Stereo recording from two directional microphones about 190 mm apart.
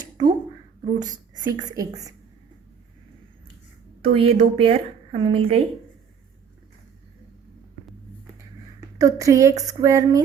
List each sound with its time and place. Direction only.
0.0 s a sound: 20° right (ahead or behind)
0.9 s speech: 20° right (ahead or behind)
4.0 s a woman's voice: 30° right (ahead or behind)
9.0 s speech: 15° right (ahead or behind)